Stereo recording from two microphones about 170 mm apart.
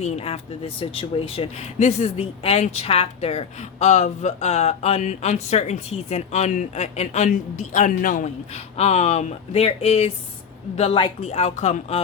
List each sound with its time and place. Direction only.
0.0 s speech: 35° left (ahead or behind); by 8.3 s 50° left (ahead or behind)
8.8 s speech: 40° left (ahead or behind)